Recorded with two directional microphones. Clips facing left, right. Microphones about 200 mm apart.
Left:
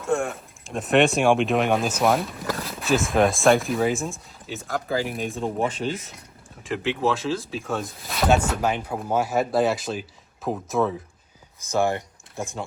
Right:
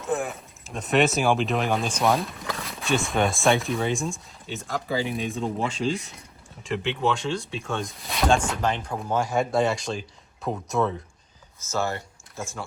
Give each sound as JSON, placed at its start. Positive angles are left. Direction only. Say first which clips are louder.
{"t": 0.0, "sound": "speech", "louder": "left 3 dB", "side_deg": 0}
{"t": 11.6, "sound": "speech", "louder": "left 5 dB", "side_deg": 15}